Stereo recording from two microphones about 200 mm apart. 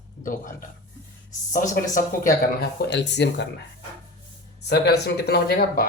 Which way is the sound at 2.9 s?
60° left (ahead or behind).